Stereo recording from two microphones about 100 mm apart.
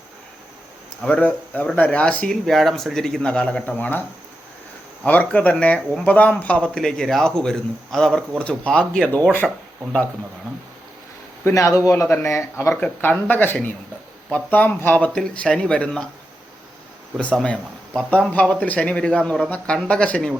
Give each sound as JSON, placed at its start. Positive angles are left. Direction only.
{"t": 1.0, "sound": "speech", "side_deg": 15}
{"t": 2.3, "sound": "speech", "side_deg": 0}
{"t": 5.0, "sound": "speech", "side_deg": 15}
{"t": 9.4, "sound": "speech", "side_deg": -5}
{"t": 11.4, "sound": "speech", "side_deg": 30}
{"t": 15.1, "sound": "speech", "side_deg": 10}
{"t": 17.4, "sound": "speech", "side_deg": 10}